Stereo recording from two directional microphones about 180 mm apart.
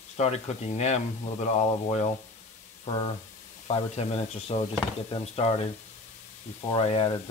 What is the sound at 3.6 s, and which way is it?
Speech, 35° left (ahead or behind).